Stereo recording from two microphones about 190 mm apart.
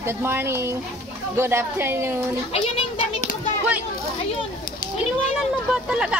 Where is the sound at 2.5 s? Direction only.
30° left (ahead or behind).